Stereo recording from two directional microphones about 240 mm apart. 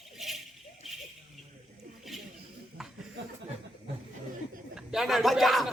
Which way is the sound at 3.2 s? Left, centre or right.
Right.